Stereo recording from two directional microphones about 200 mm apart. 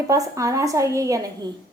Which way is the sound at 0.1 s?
15° right (ahead or behind).